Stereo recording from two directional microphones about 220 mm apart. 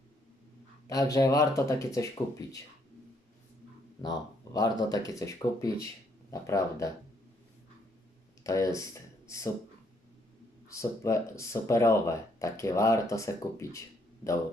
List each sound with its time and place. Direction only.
0.9 s speech: 15° left (ahead or behind)
4.0 s speech: 15° left (ahead or behind)
8.4 s speech: 15° left (ahead or behind)
10.7 s speech: 15° left (ahead or behind)